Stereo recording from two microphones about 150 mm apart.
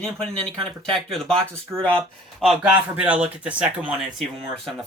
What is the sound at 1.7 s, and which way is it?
Speech, 15° right (ahead or behind).